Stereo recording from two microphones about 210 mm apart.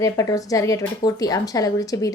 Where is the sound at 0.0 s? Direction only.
15° left (ahead or behind).